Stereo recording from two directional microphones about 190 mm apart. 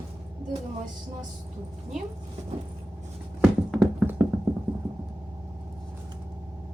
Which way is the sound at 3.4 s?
5° right (ahead or behind).